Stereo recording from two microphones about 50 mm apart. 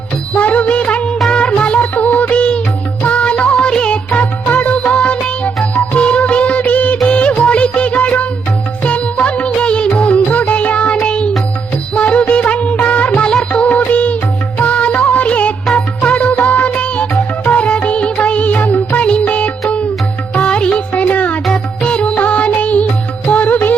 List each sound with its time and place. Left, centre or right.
0.3 s music: left
5.7 s music of bollywood: left
8.8 s music: left
10.2 s music: left
11.9 s music of bollywood: left
12.8 s music: left